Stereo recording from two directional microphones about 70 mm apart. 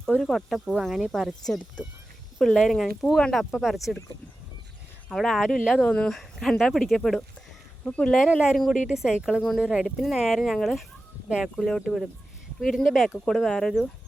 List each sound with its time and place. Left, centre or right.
0.2 s speech: centre
0.7 s speech: centre
5.1 s speech: centre
5.7 s speech: centre
7.9 s speech: centre
8.3 s speech: centre
11.3 s speech: centre
11.5 s speech: centre
11.8 s speech: centre